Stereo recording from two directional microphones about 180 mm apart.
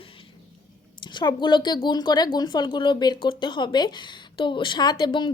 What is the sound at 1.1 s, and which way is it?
Speech, 25° left (ahead or behind).